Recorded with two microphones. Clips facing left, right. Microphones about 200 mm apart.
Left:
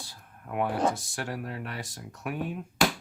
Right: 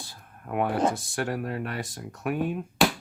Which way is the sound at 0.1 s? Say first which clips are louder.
Right 5 dB; 55° right (ahead or behind).